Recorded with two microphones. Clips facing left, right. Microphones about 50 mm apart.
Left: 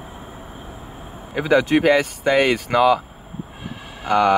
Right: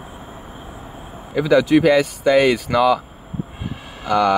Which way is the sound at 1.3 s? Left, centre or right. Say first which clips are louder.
Right 2 dB; left.